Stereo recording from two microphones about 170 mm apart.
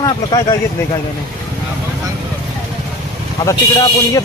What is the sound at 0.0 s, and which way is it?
Speech, 25° left (ahead or behind).